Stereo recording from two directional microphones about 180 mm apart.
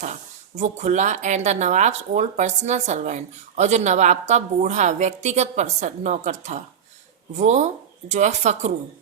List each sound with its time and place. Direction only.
0.5 s speech: 40° right (ahead or behind)